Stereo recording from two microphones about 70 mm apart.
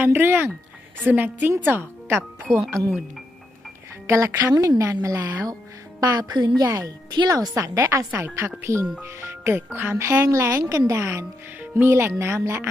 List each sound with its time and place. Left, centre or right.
0.0 s speech: right
4.0 s speech: right
4.5 s speech: right
6.0 s a woman's voice: right
10.0 s speech: right